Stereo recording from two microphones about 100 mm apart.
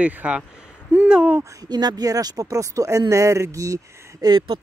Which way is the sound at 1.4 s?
40° right (ahead or behind).